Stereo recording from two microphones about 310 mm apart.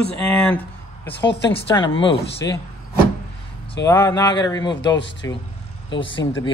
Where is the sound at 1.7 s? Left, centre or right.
Centre.